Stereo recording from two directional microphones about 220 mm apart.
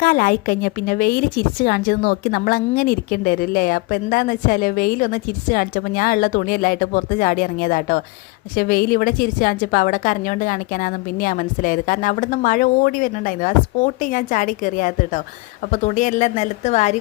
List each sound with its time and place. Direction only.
0.0 s speech: 40° left (ahead or behind)